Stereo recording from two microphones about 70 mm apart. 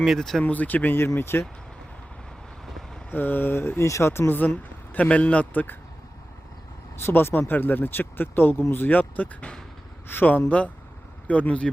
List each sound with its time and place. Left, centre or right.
0.2 s speech: centre
0.4 s speech: left
0.9 s speech: left
2.6 s vehicle: centre
3.1 s speech: left
6.9 s speech: left